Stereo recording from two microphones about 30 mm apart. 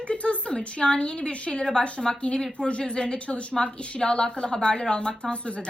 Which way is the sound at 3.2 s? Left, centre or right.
Left.